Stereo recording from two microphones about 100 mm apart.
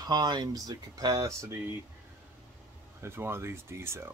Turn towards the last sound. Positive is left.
turn(degrees=-25)  # may be behind; listen again after turning